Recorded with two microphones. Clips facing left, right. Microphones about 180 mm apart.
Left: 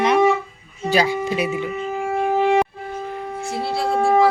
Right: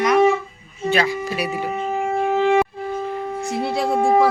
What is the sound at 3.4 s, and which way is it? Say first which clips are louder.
Music: even; 15° right (ahead or behind).